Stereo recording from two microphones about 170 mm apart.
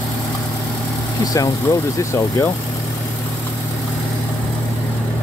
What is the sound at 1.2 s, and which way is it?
Speech, 20° left (ahead or behind).